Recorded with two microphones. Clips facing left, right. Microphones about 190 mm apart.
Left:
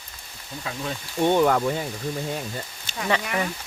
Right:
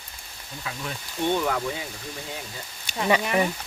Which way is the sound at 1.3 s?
50° left (ahead or behind).